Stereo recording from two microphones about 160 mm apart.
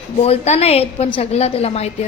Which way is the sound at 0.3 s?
40° left (ahead or behind).